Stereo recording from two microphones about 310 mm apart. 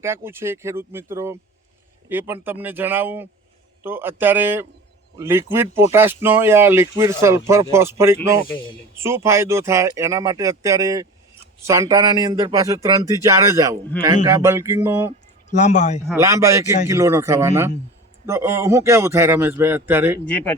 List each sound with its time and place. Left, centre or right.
0.0 s speech: centre
15.4 s speech: left
16.0 s speech: centre
20.3 s speech: centre